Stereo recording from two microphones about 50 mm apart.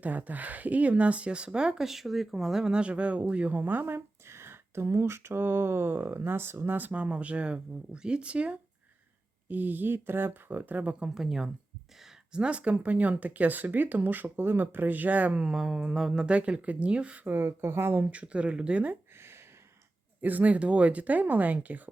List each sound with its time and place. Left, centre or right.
0.0 s speech: right; by 1.9 s centre
1.9 s speech: centre; by 6.7 s right
6.7 s speech: right
6.9 s speech: right
9.5 s speech: right
11.0 s speech: centre
12.3 s speech: right
17.2 s speech: right
17.9 s speech: right
20.2 s speech: right